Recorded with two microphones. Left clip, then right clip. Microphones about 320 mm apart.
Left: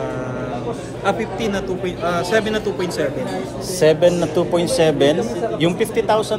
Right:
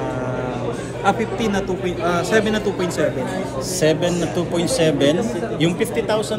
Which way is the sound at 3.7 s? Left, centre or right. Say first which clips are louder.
Left 5 dB; centre.